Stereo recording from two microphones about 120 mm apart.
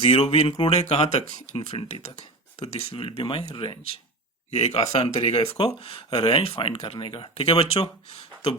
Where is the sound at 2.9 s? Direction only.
45° left (ahead or behind).